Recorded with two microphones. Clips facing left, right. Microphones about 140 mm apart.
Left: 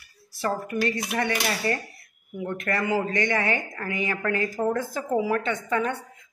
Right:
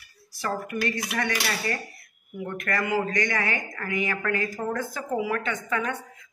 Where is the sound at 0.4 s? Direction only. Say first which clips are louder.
Left 3 dB; 30° left (ahead or behind).